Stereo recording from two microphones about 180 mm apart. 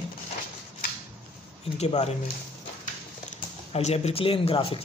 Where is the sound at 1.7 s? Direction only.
35° left (ahead or behind).